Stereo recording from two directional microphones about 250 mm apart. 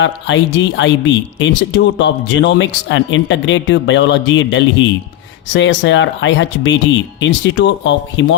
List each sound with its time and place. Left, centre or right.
0.0 s speech: left